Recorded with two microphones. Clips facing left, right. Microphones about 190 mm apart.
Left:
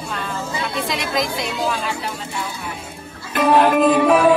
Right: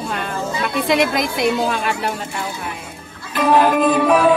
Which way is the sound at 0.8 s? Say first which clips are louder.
Right 9 dB; 60° right (ahead or behind).